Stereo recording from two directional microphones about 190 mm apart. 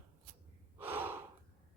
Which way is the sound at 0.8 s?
10° right (ahead or behind).